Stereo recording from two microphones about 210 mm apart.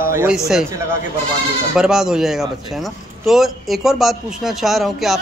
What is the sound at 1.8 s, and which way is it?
A man's voice, centre (ahead or behind).